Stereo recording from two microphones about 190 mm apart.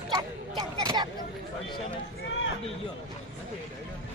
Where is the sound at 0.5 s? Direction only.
25° right (ahead or behind).